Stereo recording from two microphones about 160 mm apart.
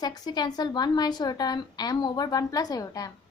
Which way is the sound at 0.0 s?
25° left (ahead or behind).